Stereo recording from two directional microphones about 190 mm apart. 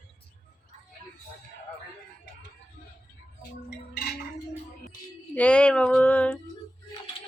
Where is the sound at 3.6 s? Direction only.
55° left (ahead or behind).